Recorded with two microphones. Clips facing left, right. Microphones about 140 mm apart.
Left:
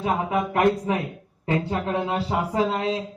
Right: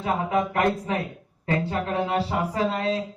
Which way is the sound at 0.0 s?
20° left (ahead or behind).